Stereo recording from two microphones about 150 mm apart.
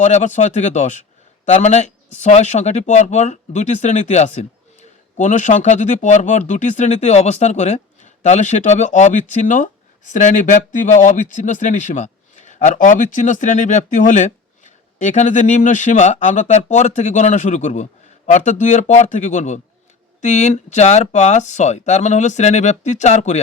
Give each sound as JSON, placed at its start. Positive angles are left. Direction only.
{"t": 0.0, "sound": "speech", "side_deg": 55}